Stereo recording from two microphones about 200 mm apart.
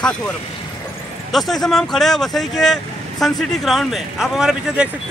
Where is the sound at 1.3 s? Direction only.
Centre (ahead or behind).